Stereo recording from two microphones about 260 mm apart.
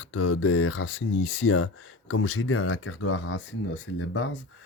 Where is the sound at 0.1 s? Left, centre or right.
Left.